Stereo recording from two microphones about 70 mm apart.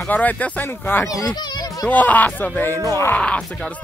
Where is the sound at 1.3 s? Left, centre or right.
Left.